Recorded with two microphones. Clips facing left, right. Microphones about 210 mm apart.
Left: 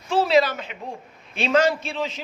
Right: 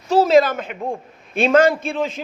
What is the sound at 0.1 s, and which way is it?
A man's voice, 45° right (ahead or behind).